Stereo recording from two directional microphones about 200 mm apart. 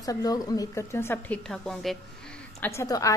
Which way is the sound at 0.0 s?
20° left (ahead or behind).